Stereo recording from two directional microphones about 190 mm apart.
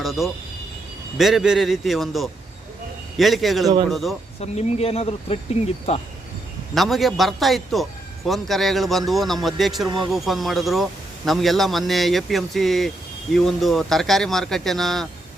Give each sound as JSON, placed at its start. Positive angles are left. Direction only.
{"t": 0.0, "sound": "a man's voice", "side_deg": 0}
{"t": 4.4, "sound": "speech", "side_deg": 30}
{"t": 6.7, "sound": "a man's voice", "side_deg": 0}